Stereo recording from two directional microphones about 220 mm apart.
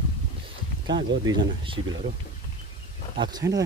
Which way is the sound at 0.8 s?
20° right (ahead or behind).